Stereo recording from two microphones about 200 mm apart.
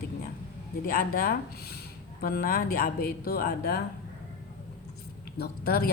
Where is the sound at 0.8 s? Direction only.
45° left (ahead or behind).